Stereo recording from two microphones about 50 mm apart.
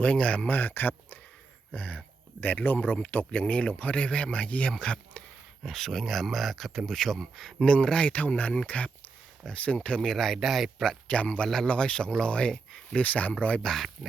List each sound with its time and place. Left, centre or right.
0.0 s speech: left
0.5 s speech: left
5.6 s speech: centre
7.6 s speech: centre
10.0 s speech: centre
11.1 s speech: left
11.4 s speech: centre
11.7 s speech: centre
13.6 s speech: centre